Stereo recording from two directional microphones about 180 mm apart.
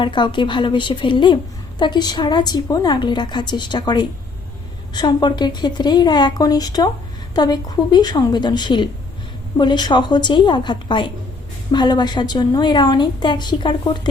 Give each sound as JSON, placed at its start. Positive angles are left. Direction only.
{"t": 0.0, "sound": "a woman's voice", "side_deg": 25}